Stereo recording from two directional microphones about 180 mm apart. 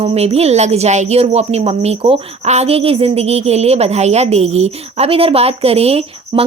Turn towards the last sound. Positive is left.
turn(degrees=-35)  # may be behind; listen again after turning